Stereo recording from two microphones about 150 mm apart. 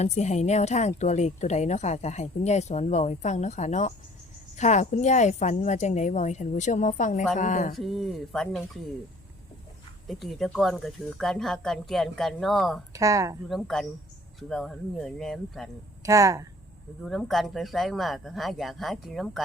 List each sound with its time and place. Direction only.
0.0 s a woman's voice: 50° left (ahead or behind)
7.8 s speech: centre (ahead or behind)
10.1 s speech: centre (ahead or behind)
12.9 s speech: 20° right (ahead or behind)
13.5 s speech: centre (ahead or behind)
16.0 s speech: 20° right (ahead or behind)
17.1 s speech: centre (ahead or behind)